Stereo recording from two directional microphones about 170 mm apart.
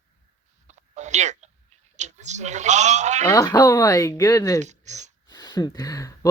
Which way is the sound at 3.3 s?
20° left (ahead or behind).